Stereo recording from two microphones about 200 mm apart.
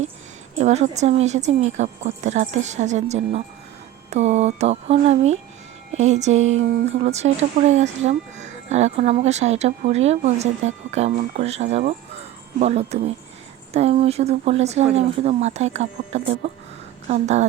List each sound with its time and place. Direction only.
0.6 s speech: 35° right (ahead or behind)